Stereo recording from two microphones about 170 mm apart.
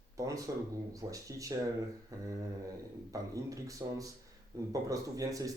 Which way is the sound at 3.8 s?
15° right (ahead or behind).